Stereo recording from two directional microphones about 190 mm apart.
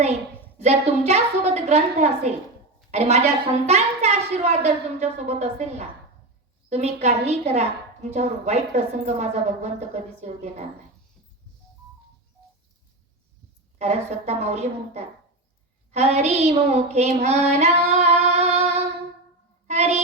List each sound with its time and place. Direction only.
0.6 s a woman's voice: 35° right (ahead or behind)
13.7 s a woman's voice: 35° right (ahead or behind)
15.9 s child singing: 35° right (ahead or behind)